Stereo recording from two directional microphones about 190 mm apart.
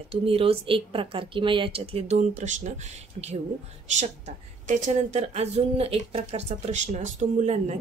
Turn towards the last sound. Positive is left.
turn(degrees=-40)  # may be behind; listen again after turning